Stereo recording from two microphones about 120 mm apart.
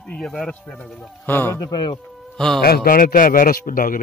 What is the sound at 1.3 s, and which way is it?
Speech, 15° left (ahead or behind).